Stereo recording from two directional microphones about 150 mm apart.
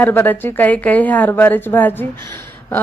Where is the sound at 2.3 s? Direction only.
15° left (ahead or behind).